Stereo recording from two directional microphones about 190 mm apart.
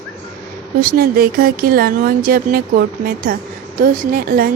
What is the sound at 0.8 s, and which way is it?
A woman's voice, 50° right (ahead or behind).